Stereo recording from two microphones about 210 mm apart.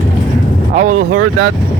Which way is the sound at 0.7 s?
40° right (ahead or behind).